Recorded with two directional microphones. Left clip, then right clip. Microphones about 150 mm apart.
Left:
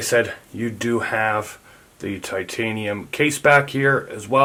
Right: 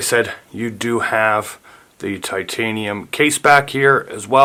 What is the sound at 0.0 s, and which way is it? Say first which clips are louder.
Speech: right 2 dB; 55° right (ahead or behind).